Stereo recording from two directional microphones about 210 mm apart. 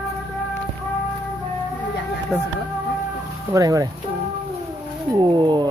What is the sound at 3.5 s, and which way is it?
Speech, 15° right (ahead or behind).